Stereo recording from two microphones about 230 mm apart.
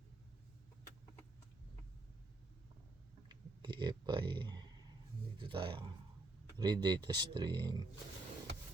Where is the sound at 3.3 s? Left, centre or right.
Centre.